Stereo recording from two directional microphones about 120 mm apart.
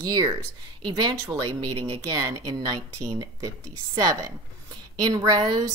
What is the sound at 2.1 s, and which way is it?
Speech, 35° right (ahead or behind).